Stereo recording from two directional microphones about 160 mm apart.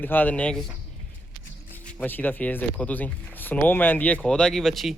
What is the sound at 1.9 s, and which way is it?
Speech, 10° left (ahead or behind).